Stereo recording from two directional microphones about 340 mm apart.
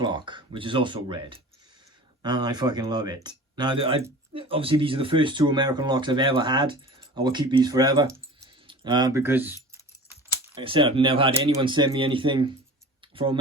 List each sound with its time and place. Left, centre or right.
0.0 s speech: centre
13.0 s tick: centre